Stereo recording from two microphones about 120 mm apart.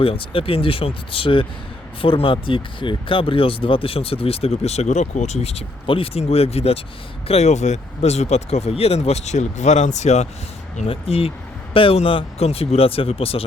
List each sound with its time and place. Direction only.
0.0 s speech: 50° left (ahead or behind); by 10.2 s 70° left (ahead or behind)
10.8 s speech: 55° left (ahead or behind)